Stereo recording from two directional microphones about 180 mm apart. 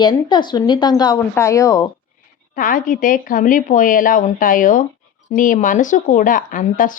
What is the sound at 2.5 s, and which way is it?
Speech, 50° left (ahead or behind).